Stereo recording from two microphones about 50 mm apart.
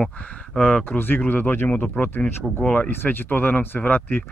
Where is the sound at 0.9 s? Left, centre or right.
Left.